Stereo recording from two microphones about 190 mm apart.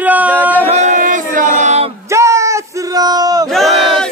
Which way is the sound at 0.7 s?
40° right (ahead or behind).